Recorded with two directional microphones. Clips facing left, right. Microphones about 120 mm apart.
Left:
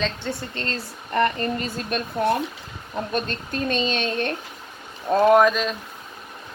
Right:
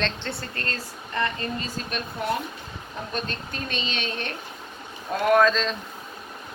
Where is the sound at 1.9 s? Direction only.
45° left (ahead or behind).